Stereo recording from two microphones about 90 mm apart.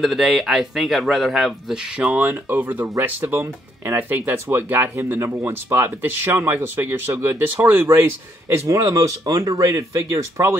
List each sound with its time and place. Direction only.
0.0 s a man's voice: centre (ahead or behind)
2.0 s speech: 15° right (ahead or behind); by 10.6 s 30° right (ahead or behind)